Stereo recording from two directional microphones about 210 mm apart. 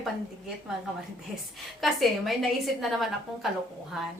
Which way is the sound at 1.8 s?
Centre (ahead or behind).